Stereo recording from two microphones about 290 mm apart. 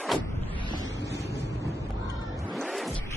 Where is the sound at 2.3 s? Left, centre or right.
Centre.